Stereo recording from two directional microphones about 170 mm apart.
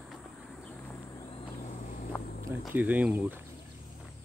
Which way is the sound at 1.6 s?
45° left (ahead or behind).